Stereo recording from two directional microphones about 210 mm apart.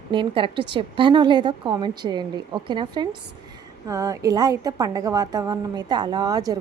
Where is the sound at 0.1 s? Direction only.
25° right (ahead or behind).